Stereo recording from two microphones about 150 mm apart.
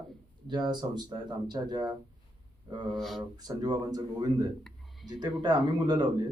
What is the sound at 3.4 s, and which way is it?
Speech, 25° right (ahead or behind).